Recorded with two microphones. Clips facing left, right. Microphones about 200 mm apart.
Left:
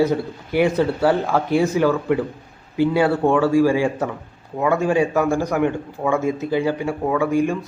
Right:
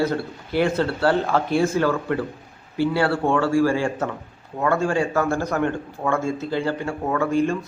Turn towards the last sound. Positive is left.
turn(degrees=15)  # may be behind; listen again after turning